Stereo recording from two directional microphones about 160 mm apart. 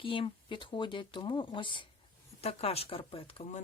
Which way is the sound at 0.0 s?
30° left (ahead or behind).